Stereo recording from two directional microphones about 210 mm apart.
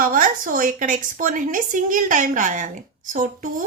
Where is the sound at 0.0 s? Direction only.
40° right (ahead or behind).